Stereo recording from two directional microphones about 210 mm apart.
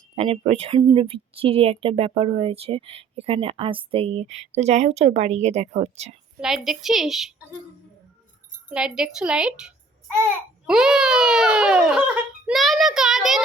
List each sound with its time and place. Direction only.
0.2 s speech: 25° right (ahead or behind)
6.4 s a woman's voice: centre (ahead or behind)
8.7 s a woman's voice: 5° right (ahead or behind)